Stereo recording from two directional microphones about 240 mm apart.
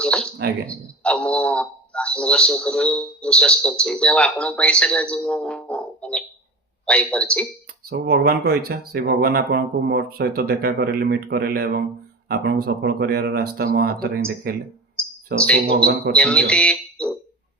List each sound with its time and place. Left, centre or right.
0.0 s a man's voice: centre
7.9 s speech: right
15.6 s speech: right
16.1 s speech: centre